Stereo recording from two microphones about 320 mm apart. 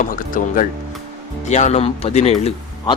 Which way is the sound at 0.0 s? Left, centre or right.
Left.